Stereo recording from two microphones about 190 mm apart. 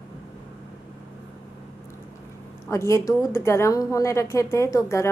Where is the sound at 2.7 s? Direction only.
15° left (ahead or behind).